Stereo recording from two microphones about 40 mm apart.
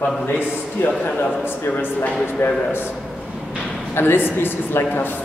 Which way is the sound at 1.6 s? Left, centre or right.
Left.